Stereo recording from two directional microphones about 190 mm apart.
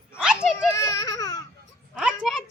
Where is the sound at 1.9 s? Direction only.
5° right (ahead or behind).